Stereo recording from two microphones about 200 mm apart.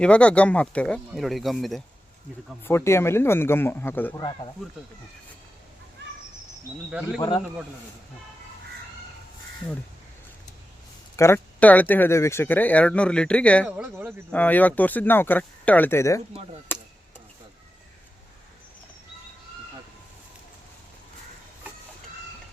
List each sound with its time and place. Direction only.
0.0 s speech: 5° left (ahead or behind)
2.6 s speech: 10° left (ahead or behind)
7.2 s a man's voice: 25° left (ahead or behind)
11.2 s speech: 10° left (ahead or behind)
13.7 s speech: 10° right (ahead or behind)
14.3 s speech: 10° left (ahead or behind)
16.7 s a sound: 10° left (ahead or behind)